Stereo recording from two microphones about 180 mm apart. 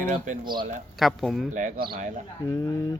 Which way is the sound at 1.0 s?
Centre (ahead or behind).